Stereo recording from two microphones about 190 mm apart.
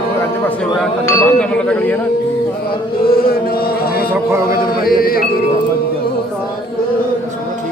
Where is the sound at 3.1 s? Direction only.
50° left (ahead or behind).